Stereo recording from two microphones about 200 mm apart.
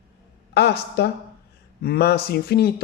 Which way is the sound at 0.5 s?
55° left (ahead or behind).